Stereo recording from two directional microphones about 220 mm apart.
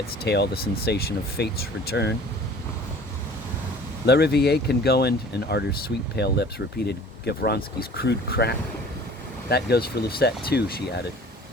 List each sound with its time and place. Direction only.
0.3 s speech: 50° left (ahead or behind)
4.0 s speech: 50° left (ahead or behind)